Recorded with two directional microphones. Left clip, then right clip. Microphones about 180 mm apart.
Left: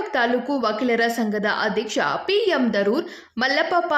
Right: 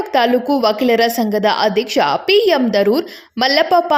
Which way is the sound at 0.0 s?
25° right (ahead or behind).